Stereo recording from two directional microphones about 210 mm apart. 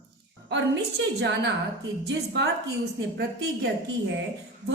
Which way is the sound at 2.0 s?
50° right (ahead or behind).